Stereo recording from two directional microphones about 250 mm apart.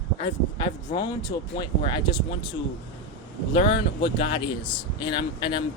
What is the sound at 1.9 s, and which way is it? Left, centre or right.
Speech, centre.